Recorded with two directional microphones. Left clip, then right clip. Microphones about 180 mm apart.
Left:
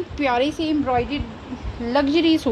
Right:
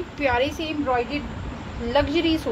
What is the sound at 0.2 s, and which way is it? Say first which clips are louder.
Speech: left 2 dB; 50° left (ahead or behind).